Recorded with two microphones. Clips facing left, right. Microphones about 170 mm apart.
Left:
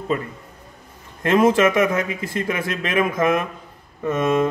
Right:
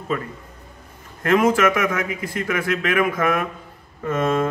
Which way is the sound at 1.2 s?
25° left (ahead or behind).